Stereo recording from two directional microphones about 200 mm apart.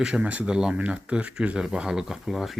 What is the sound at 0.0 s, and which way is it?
Speech, 5° right (ahead or behind).